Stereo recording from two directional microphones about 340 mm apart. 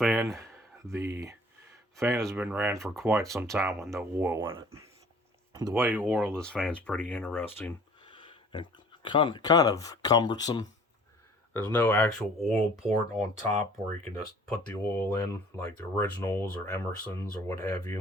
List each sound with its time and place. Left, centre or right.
0.0 s speech: centre
5.8 s speech: centre
13.1 s speech: right
14.7 s speech: centre